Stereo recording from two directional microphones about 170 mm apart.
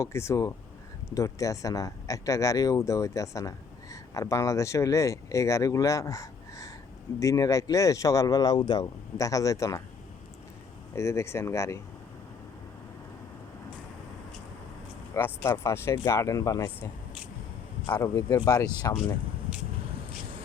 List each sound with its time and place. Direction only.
0.0 s speech: 15° left (ahead or behind)
10.9 s speech: 15° left (ahead or behind)
15.1 s speech: 15° left (ahead or behind)